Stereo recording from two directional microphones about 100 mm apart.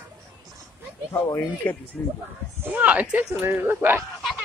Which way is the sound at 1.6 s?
15° left (ahead or behind).